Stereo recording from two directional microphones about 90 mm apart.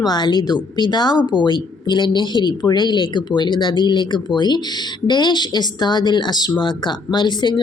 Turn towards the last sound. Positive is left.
turn(degrees=55)  # may be behind; listen again after turning